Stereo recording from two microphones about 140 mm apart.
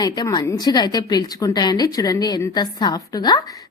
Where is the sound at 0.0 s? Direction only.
30° left (ahead or behind).